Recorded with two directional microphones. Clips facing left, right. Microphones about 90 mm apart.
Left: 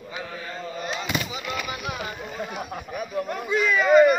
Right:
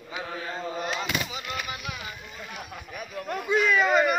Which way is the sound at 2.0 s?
50° left (ahead or behind).